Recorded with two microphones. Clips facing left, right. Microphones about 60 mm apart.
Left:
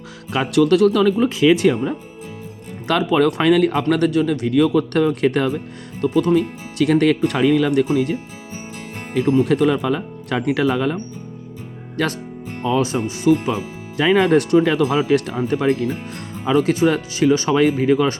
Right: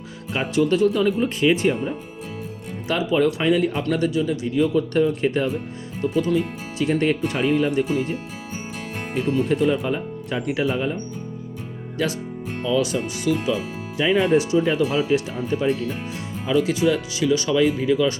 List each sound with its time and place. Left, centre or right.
0.3 s speech: left
2.8 s speech: left
6.0 s speech: left
6.7 s speech: left
9.5 s speech: left
12.6 s speech: left
13.9 s speech: left
15.4 s speech: left
16.5 s speech: left